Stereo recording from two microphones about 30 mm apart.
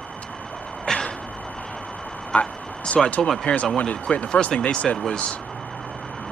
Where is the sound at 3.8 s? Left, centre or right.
Left.